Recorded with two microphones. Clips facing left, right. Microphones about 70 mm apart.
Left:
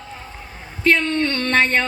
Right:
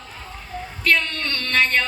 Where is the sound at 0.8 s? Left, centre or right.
Left.